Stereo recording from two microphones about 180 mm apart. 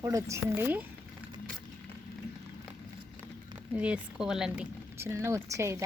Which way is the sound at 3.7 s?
5° right (ahead or behind).